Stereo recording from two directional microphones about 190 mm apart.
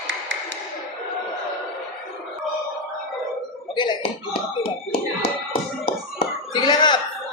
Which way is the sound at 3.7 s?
25° left (ahead or behind).